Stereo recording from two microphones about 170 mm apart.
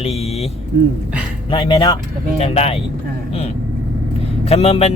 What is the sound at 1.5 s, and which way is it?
Speech, 30° left (ahead or behind).